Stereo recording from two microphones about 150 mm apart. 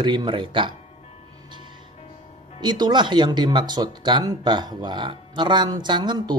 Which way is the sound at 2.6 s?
30° right (ahead or behind).